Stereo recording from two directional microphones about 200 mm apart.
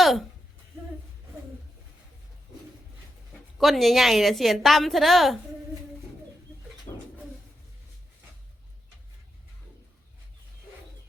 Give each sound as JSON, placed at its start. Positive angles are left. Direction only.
{"t": 0.0, "sound": "speech", "side_deg": 0}
{"t": 3.6, "sound": "a woman's voice", "side_deg": 0}
{"t": 6.9, "sound": "dog", "side_deg": 35}